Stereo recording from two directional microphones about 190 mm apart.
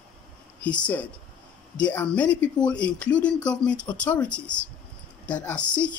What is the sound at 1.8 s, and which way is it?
Speech, 5° left (ahead or behind).